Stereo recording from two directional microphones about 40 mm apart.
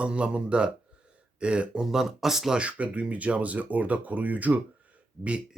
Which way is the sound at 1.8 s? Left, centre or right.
Centre.